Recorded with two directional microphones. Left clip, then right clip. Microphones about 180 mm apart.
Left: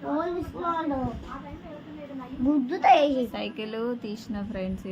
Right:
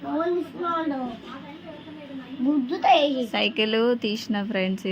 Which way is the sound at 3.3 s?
35° right (ahead or behind).